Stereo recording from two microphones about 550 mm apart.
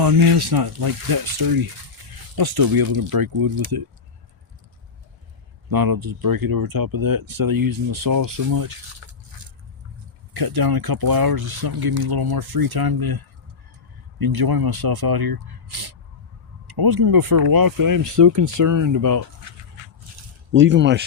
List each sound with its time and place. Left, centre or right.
0.0 s speech: right
5.7 s speech: right; by 21.0 s centre